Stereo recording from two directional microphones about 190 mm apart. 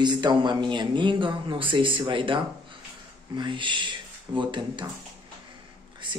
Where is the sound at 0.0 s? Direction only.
25° right (ahead or behind).